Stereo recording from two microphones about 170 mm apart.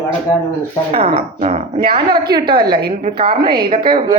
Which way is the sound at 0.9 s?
35° right (ahead or behind).